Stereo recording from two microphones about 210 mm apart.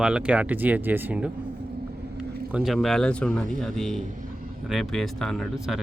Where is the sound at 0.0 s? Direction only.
5° right (ahead or behind).